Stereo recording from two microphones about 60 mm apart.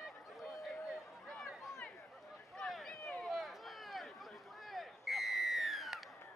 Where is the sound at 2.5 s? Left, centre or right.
Centre.